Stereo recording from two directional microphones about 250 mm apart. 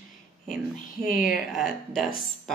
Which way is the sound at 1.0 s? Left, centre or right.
Left.